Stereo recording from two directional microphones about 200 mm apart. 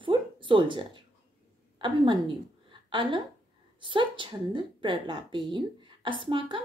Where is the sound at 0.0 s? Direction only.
25° right (ahead or behind).